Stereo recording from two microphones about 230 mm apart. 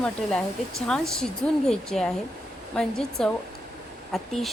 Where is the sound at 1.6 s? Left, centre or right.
Centre.